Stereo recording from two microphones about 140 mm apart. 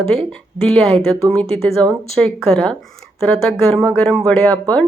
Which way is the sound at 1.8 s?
30° right (ahead or behind).